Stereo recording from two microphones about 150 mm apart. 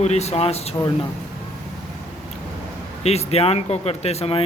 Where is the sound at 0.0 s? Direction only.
45° left (ahead or behind).